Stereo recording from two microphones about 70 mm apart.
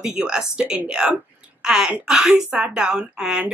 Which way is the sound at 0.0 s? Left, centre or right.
Centre.